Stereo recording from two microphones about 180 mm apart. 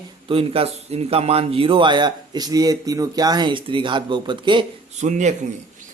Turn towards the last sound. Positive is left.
turn(degrees=-40)  # may be behind; listen again after turning